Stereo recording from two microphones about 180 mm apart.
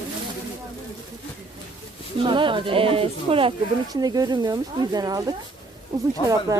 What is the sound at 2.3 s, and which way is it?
Speech, 25° right (ahead or behind).